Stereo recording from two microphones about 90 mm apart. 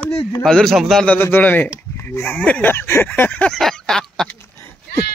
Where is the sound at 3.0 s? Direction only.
20° left (ahead or behind).